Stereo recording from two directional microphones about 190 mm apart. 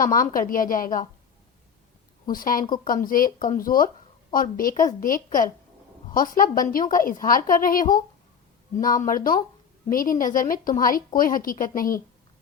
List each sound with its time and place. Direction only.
0.0 s a woman's voice: 45° left (ahead or behind)
2.3 s a woman's voice: 45° left (ahead or behind)